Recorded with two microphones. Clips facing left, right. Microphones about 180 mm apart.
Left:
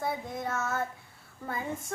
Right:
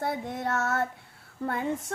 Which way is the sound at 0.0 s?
65° right (ahead or behind).